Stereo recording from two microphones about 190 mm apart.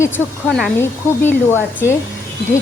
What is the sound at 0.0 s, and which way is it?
Speech, 10° left (ahead or behind).